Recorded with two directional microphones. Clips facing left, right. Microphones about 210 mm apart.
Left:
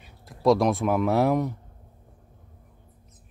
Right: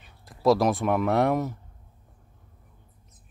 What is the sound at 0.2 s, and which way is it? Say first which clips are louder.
Speech: left 1 dB; centre (ahead or behind).